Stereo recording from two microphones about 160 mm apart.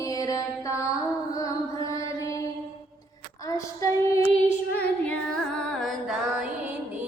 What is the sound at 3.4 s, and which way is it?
Female singing, 20° left (ahead or behind).